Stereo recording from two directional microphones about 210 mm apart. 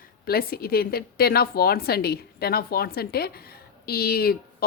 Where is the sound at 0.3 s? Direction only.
45° left (ahead or behind).